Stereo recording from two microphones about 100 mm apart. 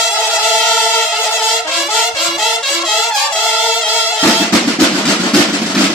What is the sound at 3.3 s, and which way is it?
Music, 10° left (ahead or behind).